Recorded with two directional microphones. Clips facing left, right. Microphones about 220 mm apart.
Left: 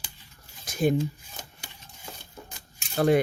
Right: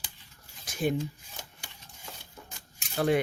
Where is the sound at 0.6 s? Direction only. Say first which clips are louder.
Left 5 dB; 40° left (ahead or behind).